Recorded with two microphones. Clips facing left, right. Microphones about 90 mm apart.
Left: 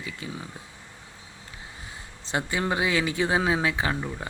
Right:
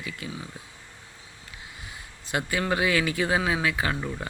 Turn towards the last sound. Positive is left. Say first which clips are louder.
# even
turn(degrees=15)  # may be behind; listen again after turning